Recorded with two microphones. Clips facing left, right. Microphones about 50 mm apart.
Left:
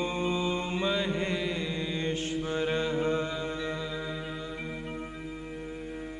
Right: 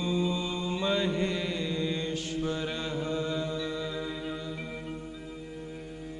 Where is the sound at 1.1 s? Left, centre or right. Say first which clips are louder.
Right 1 dB; centre.